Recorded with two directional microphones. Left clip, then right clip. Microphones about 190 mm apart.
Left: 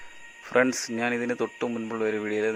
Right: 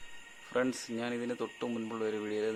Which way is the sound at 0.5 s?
30° left (ahead or behind).